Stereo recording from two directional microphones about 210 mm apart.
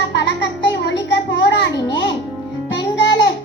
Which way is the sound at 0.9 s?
55° left (ahead or behind).